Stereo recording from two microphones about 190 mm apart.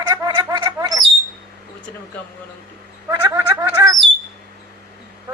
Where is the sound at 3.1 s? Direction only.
15° right (ahead or behind).